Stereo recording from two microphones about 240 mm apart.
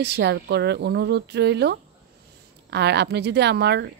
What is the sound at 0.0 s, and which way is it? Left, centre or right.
A woman's voice, right.